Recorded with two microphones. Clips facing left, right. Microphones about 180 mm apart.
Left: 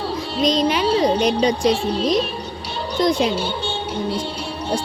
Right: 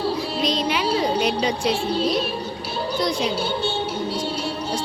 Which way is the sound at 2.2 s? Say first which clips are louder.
Right 1 dB; 5° right (ahead or behind).